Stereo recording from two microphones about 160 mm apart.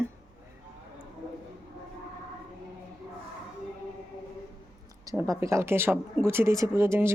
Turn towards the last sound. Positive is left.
turn(degrees=-15)  # may be behind; listen again after turning